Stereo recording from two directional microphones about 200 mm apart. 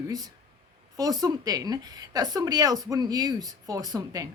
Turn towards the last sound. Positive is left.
turn(degrees=-20)  # may be behind; listen again after turning